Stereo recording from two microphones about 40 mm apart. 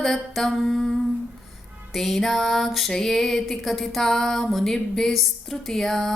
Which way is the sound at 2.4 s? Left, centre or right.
Centre.